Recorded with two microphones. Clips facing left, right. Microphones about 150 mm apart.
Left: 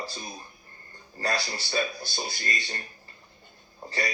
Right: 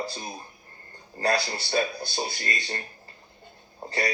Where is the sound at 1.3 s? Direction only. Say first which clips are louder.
Right 5 dB; 35° right (ahead or behind).